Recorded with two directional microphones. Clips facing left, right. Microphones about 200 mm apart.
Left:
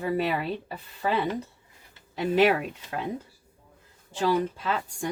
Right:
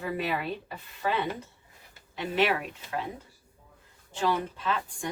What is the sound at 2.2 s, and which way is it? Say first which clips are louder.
Speech: left 6 dB; 40° left (ahead or behind).